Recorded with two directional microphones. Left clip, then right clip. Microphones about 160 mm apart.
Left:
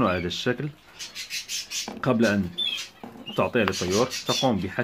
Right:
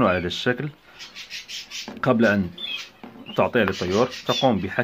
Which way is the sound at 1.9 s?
20° right (ahead or behind).